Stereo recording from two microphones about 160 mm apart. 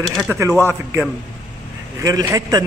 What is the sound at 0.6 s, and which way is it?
A man's voice, 15° right (ahead or behind).